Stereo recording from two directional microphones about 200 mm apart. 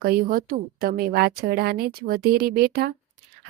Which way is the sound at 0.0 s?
45° right (ahead or behind).